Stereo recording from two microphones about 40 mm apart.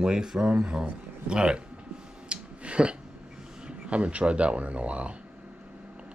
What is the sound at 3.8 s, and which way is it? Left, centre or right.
Speech, right.